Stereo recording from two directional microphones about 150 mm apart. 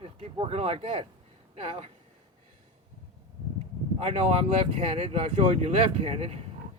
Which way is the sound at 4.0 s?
40° right (ahead or behind).